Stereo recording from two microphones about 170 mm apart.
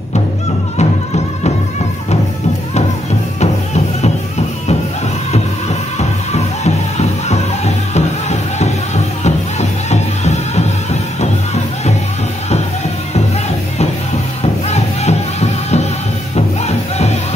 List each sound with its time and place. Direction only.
0.7 s music: 40° left (ahead or behind)
5.9 s music: 40° left (ahead or behind)
14.4 s music: 40° left (ahead or behind)